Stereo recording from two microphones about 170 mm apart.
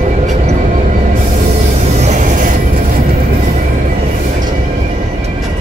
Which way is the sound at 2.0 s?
45° right (ahead or behind).